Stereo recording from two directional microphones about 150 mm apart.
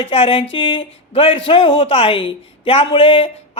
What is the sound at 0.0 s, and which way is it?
A woman's voice, 40° left (ahead or behind).